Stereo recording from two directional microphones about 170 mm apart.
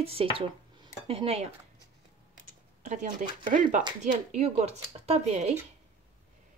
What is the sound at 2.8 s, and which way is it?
Speech, 50° right (ahead or behind).